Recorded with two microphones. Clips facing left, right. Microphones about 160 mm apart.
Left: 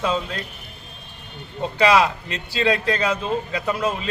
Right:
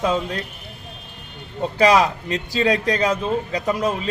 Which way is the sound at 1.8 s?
40° right (ahead or behind).